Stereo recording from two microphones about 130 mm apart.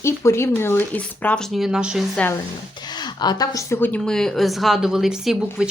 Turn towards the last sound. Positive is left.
turn(degrees=-5)  # may be behind; listen again after turning